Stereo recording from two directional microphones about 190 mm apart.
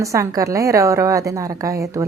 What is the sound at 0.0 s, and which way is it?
Speech, 15° right (ahead or behind).